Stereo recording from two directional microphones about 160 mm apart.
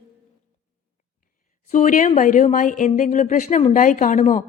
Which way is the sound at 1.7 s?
50° left (ahead or behind).